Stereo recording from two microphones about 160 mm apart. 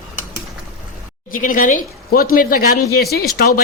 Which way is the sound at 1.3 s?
55° left (ahead or behind).